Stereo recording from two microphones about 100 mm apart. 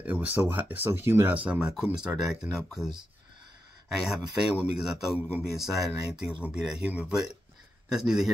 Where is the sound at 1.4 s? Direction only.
10° right (ahead or behind).